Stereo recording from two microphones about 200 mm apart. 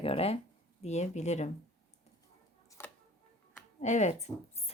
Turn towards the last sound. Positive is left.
turn(degrees=30)  # may be behind; listen again after turning